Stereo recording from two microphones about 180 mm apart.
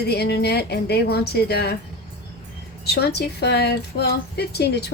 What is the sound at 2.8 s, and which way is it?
Speech, 65° left (ahead or behind).